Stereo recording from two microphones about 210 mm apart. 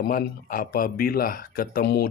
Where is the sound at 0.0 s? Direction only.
45° left (ahead or behind).